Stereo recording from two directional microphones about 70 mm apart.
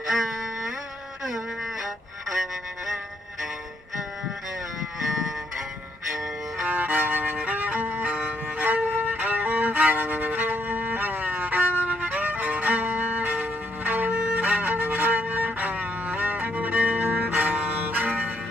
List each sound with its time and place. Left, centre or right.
0.1 s music: centre
6.7 s music: right